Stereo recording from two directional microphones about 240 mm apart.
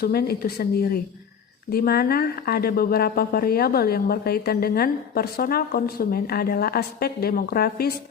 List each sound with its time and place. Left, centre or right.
0.0 s a woman's voice: left